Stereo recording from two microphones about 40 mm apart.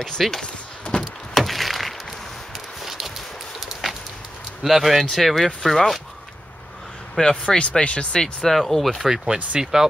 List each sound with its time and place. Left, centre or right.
0.0 s speech: centre
0.4 s a sound: left
1.3 s a sound: centre
2.8 s clip-clop: centre
3.5 s a sound: centre
4.6 s speech: centre
7.2 s speech: centre
7.5 s speech: left
8.1 s speech: centre
8.5 s speech: centre
9.0 s speech: centre